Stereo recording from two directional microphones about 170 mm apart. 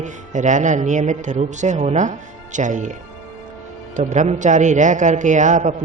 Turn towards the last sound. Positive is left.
turn(degrees=-45)  # may be behind; listen again after turning